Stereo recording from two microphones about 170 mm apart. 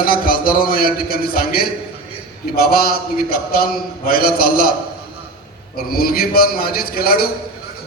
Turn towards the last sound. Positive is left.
turn(degrees=60)  # may be behind; listen again after turning